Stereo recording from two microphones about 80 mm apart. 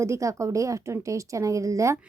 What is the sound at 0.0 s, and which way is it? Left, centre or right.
A woman's voice, right.